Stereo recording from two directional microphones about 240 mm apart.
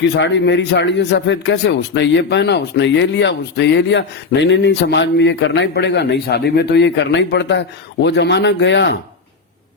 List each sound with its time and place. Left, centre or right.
0.2 s a man's voice: left